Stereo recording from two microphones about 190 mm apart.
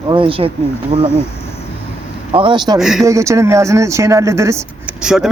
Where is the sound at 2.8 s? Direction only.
Centre (ahead or behind).